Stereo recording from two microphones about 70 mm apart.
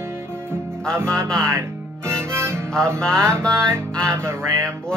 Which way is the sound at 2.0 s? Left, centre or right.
Right.